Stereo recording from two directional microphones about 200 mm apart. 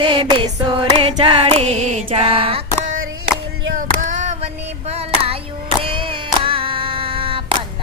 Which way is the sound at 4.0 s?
35° right (ahead or behind).